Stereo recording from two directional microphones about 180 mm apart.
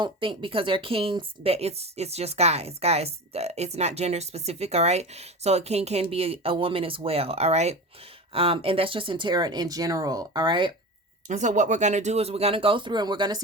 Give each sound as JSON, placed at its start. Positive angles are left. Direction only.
{"t": 0.0, "sound": "a woman's voice", "side_deg": -30}
{"t": 11.3, "sound": "a woman's voice", "side_deg": -40}